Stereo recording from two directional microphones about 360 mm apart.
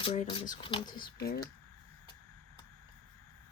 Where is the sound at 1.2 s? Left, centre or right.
Left.